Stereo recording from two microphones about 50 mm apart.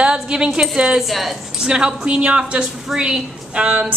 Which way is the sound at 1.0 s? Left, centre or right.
Centre.